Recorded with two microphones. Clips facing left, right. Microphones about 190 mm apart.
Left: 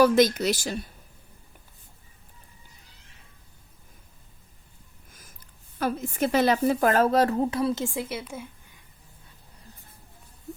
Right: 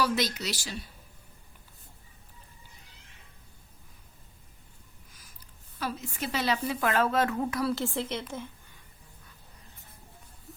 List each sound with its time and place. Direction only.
0.0 s speech: 50° left (ahead or behind)
5.8 s speech: 50° left (ahead or behind); by 8.4 s 10° left (ahead or behind)